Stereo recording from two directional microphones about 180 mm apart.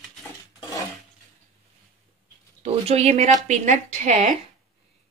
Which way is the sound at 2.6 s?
35° right (ahead or behind).